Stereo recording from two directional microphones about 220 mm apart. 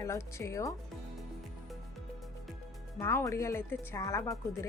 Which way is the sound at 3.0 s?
10° left (ahead or behind).